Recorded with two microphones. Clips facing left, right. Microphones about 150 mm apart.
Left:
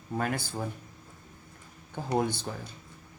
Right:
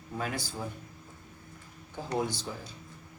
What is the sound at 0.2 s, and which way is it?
Speech, 55° left (ahead or behind).